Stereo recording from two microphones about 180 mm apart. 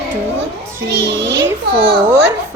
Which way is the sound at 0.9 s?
75° right (ahead or behind).